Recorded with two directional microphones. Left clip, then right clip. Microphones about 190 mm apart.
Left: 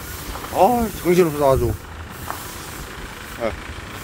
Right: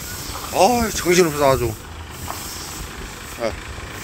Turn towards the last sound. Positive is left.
turn(degrees=10)  # may be behind; listen again after turning